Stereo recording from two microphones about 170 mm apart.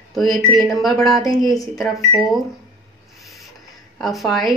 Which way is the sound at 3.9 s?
Centre (ahead or behind).